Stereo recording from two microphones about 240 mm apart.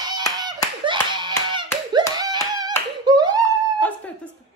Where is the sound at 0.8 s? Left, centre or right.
Centre.